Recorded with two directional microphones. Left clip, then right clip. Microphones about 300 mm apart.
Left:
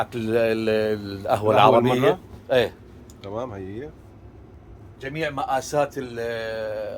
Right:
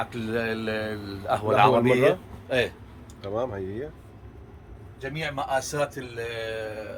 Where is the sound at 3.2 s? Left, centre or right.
Centre.